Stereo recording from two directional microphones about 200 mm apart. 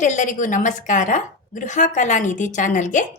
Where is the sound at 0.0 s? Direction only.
40° left (ahead or behind).